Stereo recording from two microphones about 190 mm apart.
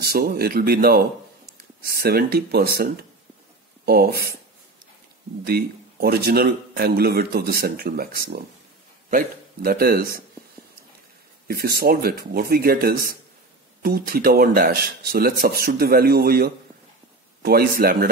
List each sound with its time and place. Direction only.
0.0 s a man's voice: 55° right (ahead or behind)
5.4 s a man's voice: 55° right (ahead or behind)
11.4 s a man's voice: 55° right (ahead or behind)